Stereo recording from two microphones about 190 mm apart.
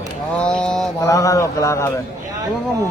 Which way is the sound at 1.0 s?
15° left (ahead or behind).